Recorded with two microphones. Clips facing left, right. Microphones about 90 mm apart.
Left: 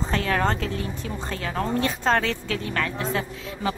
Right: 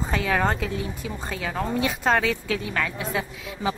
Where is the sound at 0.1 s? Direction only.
10° right (ahead or behind).